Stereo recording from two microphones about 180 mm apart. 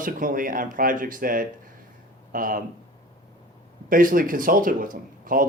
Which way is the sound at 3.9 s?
50° right (ahead or behind).